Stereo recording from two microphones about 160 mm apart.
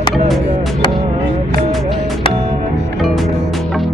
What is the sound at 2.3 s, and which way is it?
Music, 40° right (ahead or behind).